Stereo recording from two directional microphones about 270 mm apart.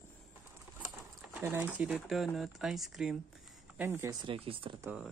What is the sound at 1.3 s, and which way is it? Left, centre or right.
Speech, centre.